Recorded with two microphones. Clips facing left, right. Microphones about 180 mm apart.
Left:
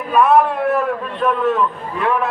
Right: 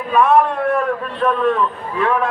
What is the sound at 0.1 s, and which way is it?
A man's voice, centre (ahead or behind).